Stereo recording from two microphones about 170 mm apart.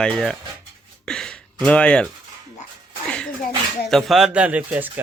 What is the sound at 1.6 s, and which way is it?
Speech, 5° left (ahead or behind).